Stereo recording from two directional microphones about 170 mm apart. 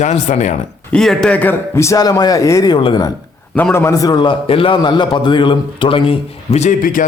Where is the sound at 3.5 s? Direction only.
10° left (ahead or behind); by 7.0 s 55° left (ahead or behind).